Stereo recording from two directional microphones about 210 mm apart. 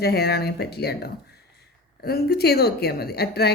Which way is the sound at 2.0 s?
50° left (ahead or behind).